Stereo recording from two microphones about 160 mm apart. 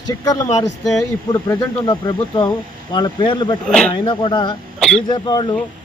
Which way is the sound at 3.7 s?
5° left (ahead or behind).